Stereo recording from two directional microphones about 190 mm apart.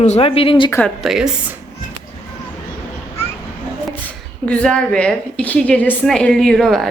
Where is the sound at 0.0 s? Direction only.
30° left (ahead or behind).